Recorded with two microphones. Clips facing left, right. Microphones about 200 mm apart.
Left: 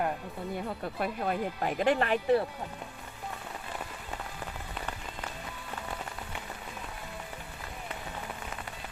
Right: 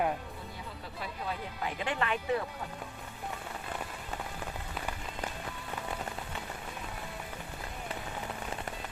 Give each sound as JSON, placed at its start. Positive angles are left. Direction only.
{"t": 0.9, "sound": "speech", "side_deg": 55}
{"t": 1.8, "sound": "speech", "side_deg": 40}